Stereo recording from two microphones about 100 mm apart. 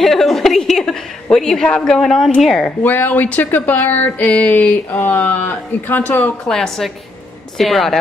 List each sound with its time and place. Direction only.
0.0 s a sound: centre (ahead or behind)
2.6 s speech: 20° left (ahead or behind)
6.4 s a woman's voice: 5° left (ahead or behind)